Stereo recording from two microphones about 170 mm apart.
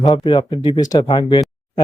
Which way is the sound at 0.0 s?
25° left (ahead or behind).